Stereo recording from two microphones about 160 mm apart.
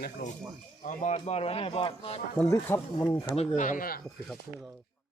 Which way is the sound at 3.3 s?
45° left (ahead or behind).